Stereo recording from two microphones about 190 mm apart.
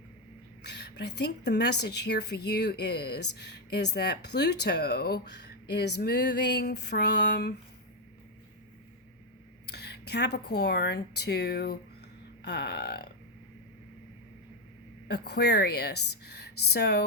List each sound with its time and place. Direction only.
0.7 s a woman's voice: 60° left (ahead or behind)
9.6 s a woman's voice: 60° left (ahead or behind)
15.0 s a woman's voice: 60° left (ahead or behind)